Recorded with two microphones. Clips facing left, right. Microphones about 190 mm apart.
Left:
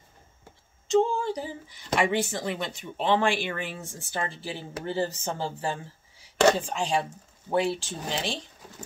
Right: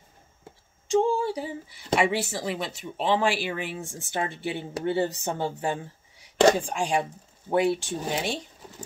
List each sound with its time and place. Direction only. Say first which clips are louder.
0.8 s a sound: even; 15° right (ahead or behind)
2.0 s speech: even; 5° right (ahead or behind)
4.3 s speech: right 5 dB; 60° right (ahead or behind)
4.9 s speech: even; 15° right (ahead or behind)